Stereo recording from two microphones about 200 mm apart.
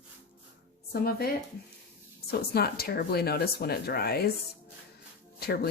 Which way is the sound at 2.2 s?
50° left (ahead or behind).